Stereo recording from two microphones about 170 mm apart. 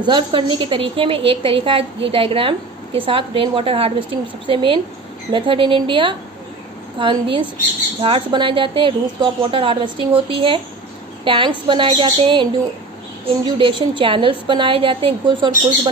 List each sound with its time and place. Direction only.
0.0 s a woman's voice: 30° right (ahead or behind)
13.6 s a woman's voice: 30° right (ahead or behind)